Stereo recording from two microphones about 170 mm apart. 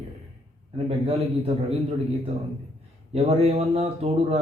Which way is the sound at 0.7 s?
35° right (ahead or behind).